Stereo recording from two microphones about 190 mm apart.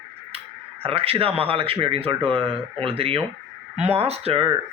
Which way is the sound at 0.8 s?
30° right (ahead or behind).